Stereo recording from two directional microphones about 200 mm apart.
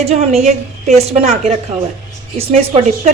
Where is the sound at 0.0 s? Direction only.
30° right (ahead or behind).